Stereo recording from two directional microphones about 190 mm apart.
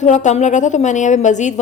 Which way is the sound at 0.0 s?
40° left (ahead or behind).